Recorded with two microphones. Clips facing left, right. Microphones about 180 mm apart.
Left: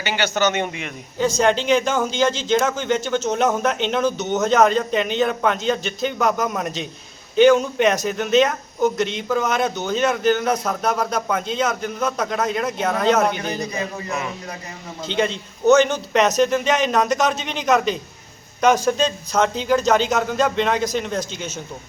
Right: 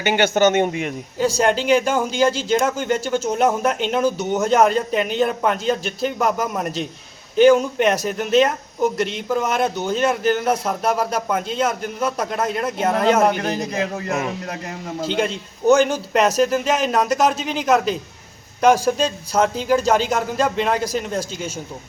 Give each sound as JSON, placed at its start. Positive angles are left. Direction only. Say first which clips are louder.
{"t": 0.0, "sound": "a man's voice", "louder": "right 5 dB", "side_deg": -50}
{"t": 1.4, "sound": "a man's voice", "louder": "even", "side_deg": -5}
{"t": 13.2, "sound": "a man's voice", "louder": "right 3 dB", "side_deg": -45}
{"t": 15.0, "sound": "a man's voice", "louder": "even", "side_deg": -5}